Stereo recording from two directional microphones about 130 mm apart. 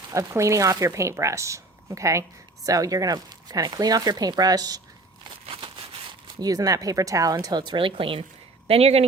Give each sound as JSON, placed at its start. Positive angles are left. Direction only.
{"t": 0.1, "sound": "speech", "side_deg": -25}
{"t": 5.5, "sound": "speech", "side_deg": -40}